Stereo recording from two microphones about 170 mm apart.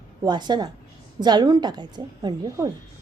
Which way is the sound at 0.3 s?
25° right (ahead or behind).